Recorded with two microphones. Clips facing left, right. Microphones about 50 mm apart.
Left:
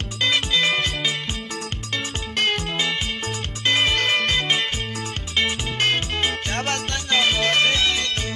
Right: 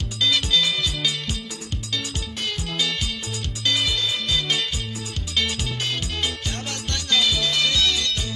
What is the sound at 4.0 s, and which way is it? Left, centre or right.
Music, left.